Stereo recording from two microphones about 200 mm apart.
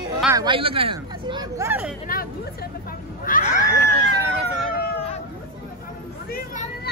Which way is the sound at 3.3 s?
40° left (ahead or behind).